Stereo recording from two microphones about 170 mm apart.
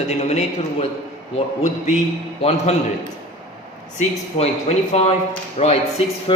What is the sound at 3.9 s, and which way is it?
A man's voice, 40° left (ahead or behind).